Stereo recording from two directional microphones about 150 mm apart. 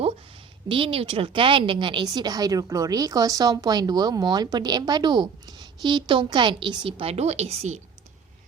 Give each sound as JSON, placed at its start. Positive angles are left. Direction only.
{"t": 0.7, "sound": "speech", "side_deg": -35}